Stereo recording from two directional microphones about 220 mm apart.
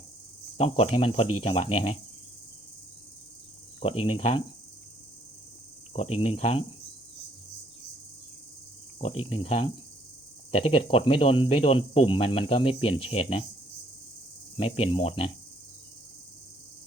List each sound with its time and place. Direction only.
0.5 s speech: 25° left (ahead or behind)
3.8 s speech: 25° left (ahead or behind)
5.9 s speech: 25° left (ahead or behind)
9.0 s speech: 25° left (ahead or behind)
14.5 s speech: 25° left (ahead or behind)